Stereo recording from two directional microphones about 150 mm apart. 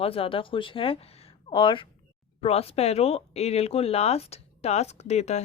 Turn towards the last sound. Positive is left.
turn(degrees=50)  # may be behind; listen again after turning